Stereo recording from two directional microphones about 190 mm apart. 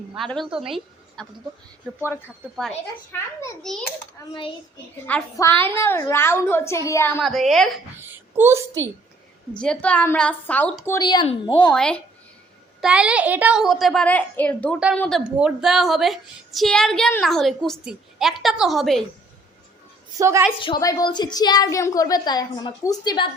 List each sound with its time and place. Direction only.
0.3 s a woman's voice: centre (ahead or behind)
5.0 s a child's voice: 10° left (ahead or behind)
7.2 s a woman's voice: centre (ahead or behind)
7.9 s a child's voice: 10° right (ahead or behind)
9.6 s a child's voice: 5° left (ahead or behind)
11.0 s a woman's voice: 25° left (ahead or behind)
11.6 s a woman's voice: 5° left (ahead or behind)
12.8 s a woman's voice: 5° right (ahead or behind)
15.2 s a woman's voice: 5° right (ahead or behind)
20.1 s a child's voice: 15° right (ahead or behind)
20.6 s a woman's voice: 25° left (ahead or behind)